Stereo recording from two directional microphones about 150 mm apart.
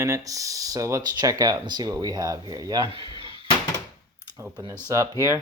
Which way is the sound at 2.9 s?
35° right (ahead or behind).